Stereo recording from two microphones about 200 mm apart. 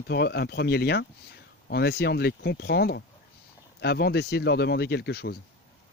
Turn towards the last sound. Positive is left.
turn(degrees=55)  # may be behind; listen again after turning